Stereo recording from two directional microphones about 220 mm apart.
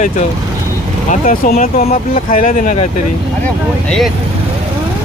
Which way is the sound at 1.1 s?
35° left (ahead or behind).